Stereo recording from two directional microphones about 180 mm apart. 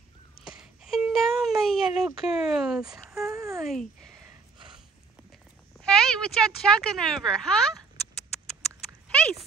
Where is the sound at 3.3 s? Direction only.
15° right (ahead or behind).